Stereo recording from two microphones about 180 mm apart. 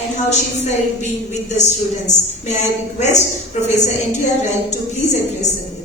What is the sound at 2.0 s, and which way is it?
A woman's voice, 40° left (ahead or behind).